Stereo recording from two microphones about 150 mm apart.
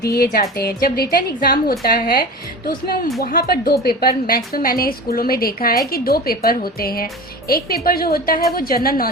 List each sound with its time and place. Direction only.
0.0 s a woman's voice: 90° left